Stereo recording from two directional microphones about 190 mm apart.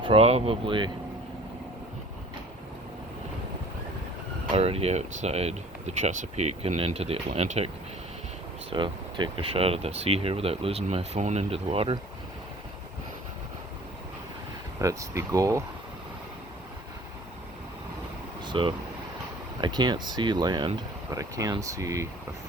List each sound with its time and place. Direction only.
0.0 s speech: 30° right (ahead or behind)
4.5 s speech: 30° right (ahead or behind)
8.7 s speech: 25° right (ahead or behind)
14.8 s speech: 15° right (ahead or behind)
18.4 s speech: 25° right (ahead or behind)